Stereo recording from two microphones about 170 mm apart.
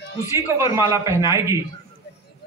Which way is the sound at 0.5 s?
15° right (ahead or behind).